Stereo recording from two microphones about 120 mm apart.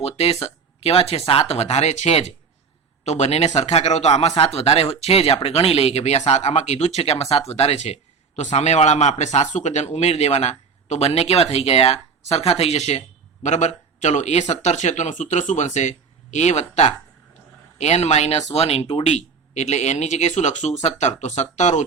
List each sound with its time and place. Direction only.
0.0 s speech: 60° left (ahead or behind)
8.4 s a man's voice: 75° left (ahead or behind)
13.4 s a man's voice: 75° left (ahead or behind)